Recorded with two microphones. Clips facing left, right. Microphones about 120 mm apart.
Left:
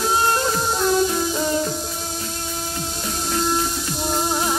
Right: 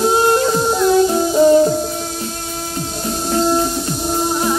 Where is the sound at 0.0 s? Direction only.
25° right (ahead or behind).